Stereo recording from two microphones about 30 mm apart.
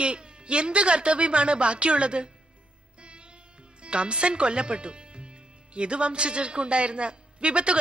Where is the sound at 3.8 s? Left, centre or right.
Right.